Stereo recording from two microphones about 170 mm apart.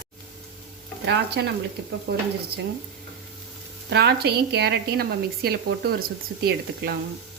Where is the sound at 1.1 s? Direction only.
75° right (ahead or behind).